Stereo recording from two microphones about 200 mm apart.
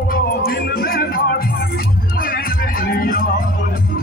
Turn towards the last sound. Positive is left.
turn(degrees=45)  # may be behind; listen again after turning